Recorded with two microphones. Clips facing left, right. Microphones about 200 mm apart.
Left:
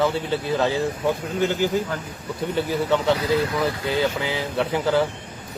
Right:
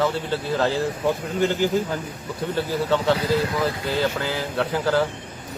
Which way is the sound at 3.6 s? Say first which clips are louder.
Left 1 dB; 25° left (ahead or behind).